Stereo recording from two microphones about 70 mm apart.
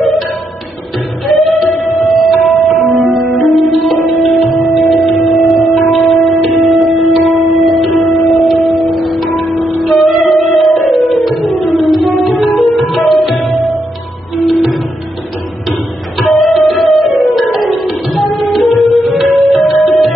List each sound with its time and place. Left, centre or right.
1.2 s music: centre
16.2 s music: centre